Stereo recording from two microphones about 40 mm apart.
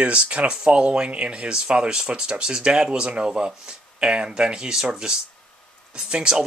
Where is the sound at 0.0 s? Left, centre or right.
Right.